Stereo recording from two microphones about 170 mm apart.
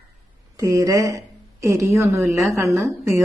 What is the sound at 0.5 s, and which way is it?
Speech, 20° right (ahead or behind).